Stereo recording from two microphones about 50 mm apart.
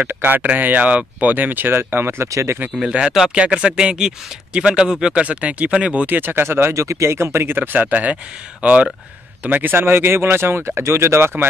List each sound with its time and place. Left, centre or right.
0.1 s speech: right
1.3 s speech: right
2.3 s speech: right
2.9 s speech: centre
6.0 s speech: right
6.7 s speech: right
7.5 s speech: right
9.8 s speech: right